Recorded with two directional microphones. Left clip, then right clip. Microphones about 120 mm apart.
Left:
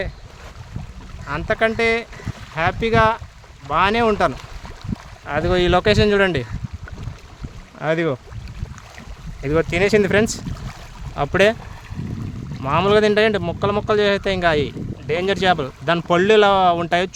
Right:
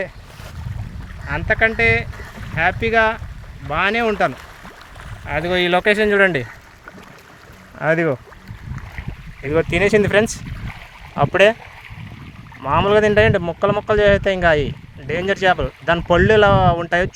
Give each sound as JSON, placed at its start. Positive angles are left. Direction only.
{"t": 1.3, "sound": "speech", "side_deg": 35}
{"t": 7.8, "sound": "speech", "side_deg": 5}
{"t": 9.4, "sound": "speech", "side_deg": 15}
{"t": 12.6, "sound": "speech", "side_deg": 20}